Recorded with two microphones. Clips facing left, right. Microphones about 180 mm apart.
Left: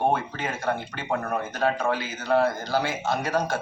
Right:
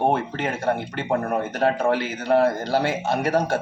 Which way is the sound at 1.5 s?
60° right (ahead or behind).